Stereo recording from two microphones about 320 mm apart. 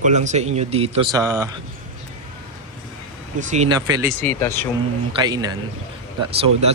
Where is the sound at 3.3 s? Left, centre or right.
Right.